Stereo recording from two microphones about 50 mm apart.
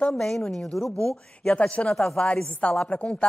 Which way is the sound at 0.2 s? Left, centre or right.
Centre.